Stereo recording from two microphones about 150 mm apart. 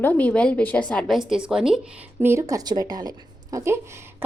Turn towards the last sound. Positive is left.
turn(degrees=-20)  # may be behind; listen again after turning